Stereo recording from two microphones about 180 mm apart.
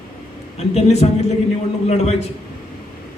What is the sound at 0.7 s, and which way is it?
A man's voice, 35° left (ahead or behind).